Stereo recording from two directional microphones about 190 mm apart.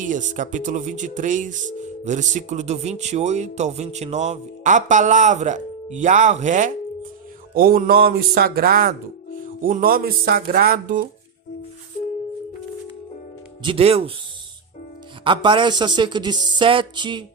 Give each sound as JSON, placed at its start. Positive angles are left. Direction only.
{"t": 0.0, "sound": "speech", "side_deg": -40}
{"t": 13.6, "sound": "speech", "side_deg": -30}
{"t": 15.2, "sound": "speech", "side_deg": -25}